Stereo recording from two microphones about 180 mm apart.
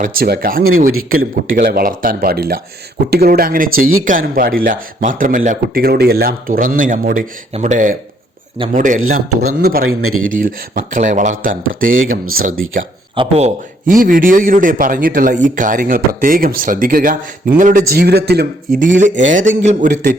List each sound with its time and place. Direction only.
0.0 s a man's voice: 55° right (ahead or behind)
13.1 s speech: 35° right (ahead or behind)
13.8 s a man's voice: 50° right (ahead or behind)